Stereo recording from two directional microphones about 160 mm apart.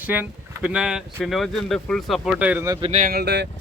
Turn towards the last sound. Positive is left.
turn(degrees=-90)